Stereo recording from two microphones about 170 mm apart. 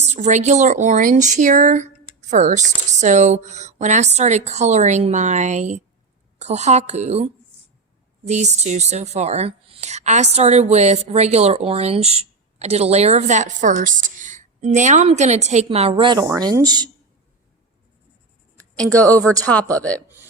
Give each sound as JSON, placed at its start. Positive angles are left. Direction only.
{"t": 0.0, "sound": "a woman's voice", "side_deg": -40}
{"t": 8.3, "sound": "a woman's voice", "side_deg": -40}
{"t": 19.3, "sound": "speech", "side_deg": 5}